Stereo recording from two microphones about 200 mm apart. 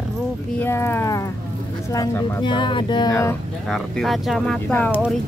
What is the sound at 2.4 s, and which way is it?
Speech, 25° left (ahead or behind).